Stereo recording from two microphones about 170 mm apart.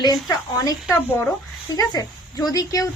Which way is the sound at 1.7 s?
20° left (ahead or behind).